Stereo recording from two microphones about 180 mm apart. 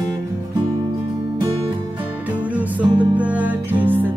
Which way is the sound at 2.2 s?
10° right (ahead or behind).